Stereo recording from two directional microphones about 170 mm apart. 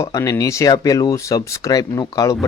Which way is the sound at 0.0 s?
20° left (ahead or behind).